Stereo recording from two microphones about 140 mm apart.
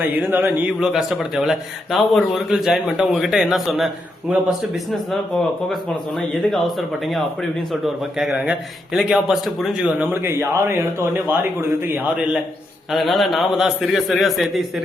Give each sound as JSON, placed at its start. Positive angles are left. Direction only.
{"t": 0.0, "sound": "a man's voice", "side_deg": -15}
{"t": 6.1, "sound": "a man's voice", "side_deg": 0}
{"t": 8.3, "sound": "a man's voice", "side_deg": -10}
{"t": 10.0, "sound": "speech", "side_deg": -15}
{"t": 12.9, "sound": "a man's voice", "side_deg": 0}